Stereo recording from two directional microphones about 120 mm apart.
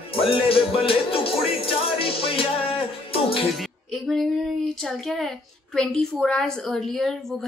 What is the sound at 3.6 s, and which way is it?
A woman's voice, centre (ahead or behind).